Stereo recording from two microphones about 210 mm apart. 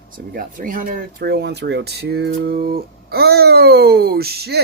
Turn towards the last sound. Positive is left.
turn(degrees=-50)  # may be behind; listen again after turning